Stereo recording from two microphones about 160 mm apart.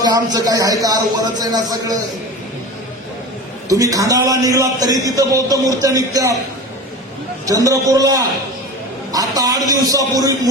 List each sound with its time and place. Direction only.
0.0 s a man's voice: 25° right (ahead or behind)
3.7 s a man's voice: 20° right (ahead or behind)
7.4 s a man's voice: 20° right (ahead or behind)